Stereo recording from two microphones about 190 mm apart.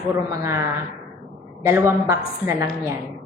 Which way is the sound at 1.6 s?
15° right (ahead or behind).